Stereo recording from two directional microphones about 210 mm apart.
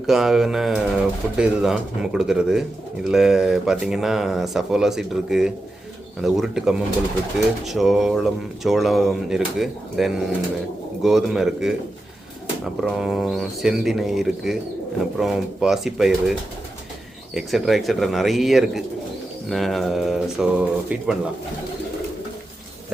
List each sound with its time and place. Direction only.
0.1 s speech: centre (ahead or behind)
12.8 s speech: centre (ahead or behind)